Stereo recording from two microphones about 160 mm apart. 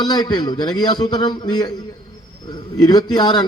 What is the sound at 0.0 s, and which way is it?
A man's voice, 25° left (ahead or behind).